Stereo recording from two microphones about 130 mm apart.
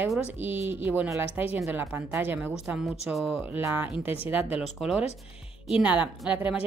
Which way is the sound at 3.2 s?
15° right (ahead or behind).